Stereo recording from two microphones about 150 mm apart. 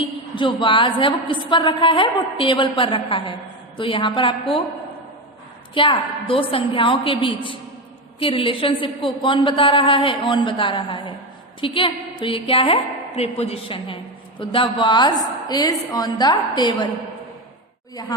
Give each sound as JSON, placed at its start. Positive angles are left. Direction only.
{"t": 0.3, "sound": "a woman's voice", "side_deg": 35}
{"t": 5.7, "sound": "a woman's voice", "side_deg": 35}